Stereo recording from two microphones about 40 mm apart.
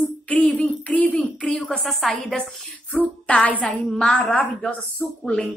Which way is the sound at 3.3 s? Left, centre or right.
Left.